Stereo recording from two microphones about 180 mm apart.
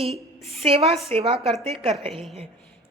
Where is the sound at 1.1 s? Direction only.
30° right (ahead or behind).